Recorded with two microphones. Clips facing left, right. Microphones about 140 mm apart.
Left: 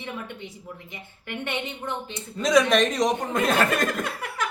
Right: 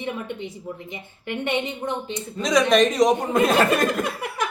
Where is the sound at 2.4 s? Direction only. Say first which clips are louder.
Right 2 dB; 5° left (ahead or behind).